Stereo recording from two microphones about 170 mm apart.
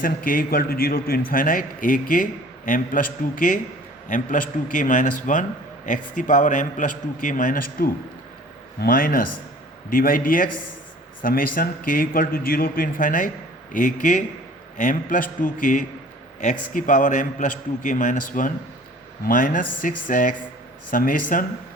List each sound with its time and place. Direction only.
0.0 s a man's voice: 55° left (ahead or behind)